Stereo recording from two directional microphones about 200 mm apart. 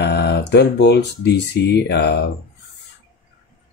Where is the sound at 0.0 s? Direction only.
55° left (ahead or behind).